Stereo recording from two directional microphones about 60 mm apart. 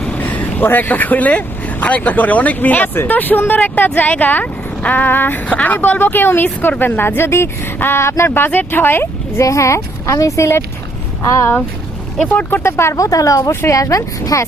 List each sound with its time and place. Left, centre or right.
0.2 s speech: left
8.3 s speech: left
9.4 s speech: left
12.3 s speech: left
12.6 s speech: left
13.1 s speech: left